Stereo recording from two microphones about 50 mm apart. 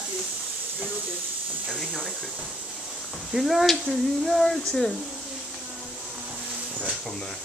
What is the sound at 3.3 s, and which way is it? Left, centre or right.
Speech, centre.